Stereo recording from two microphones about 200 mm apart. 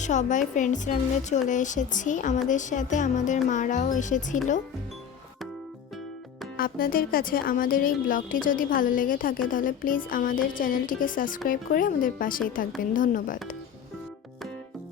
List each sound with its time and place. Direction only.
0.0 s a woman's voice: 35° left (ahead or behind)
6.6 s a woman's voice: 45° left (ahead or behind)